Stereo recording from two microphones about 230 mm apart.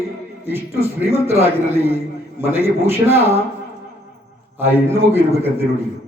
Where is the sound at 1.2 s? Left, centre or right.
Centre.